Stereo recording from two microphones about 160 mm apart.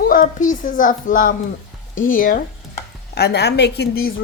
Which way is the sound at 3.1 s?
90° left.